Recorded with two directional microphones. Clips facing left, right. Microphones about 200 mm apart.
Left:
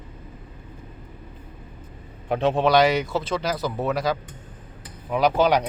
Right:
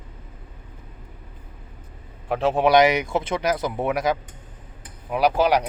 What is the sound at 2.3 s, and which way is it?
Speech, 10° right (ahead or behind).